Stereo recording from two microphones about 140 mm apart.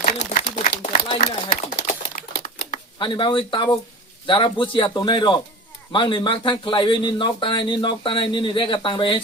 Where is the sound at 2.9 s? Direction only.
35° left (ahead or behind).